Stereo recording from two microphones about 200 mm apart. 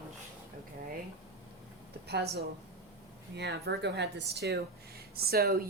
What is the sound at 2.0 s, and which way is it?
Speech, 55° right (ahead or behind).